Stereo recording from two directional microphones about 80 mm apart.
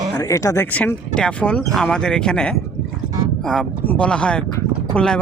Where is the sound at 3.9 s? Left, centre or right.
Centre.